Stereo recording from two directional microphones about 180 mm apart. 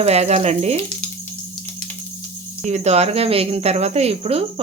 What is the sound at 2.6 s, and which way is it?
Speech, 40° right (ahead or behind).